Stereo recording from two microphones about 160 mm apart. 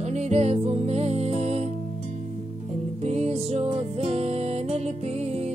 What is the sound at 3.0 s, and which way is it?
Music, 40° right (ahead or behind).